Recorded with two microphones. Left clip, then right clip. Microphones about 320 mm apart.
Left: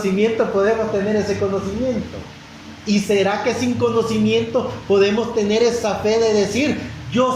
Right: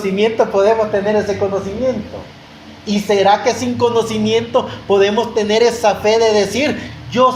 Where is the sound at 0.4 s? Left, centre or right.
Right.